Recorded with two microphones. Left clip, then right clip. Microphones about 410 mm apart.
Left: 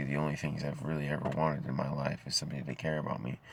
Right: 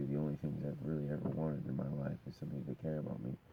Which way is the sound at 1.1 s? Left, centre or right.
Centre.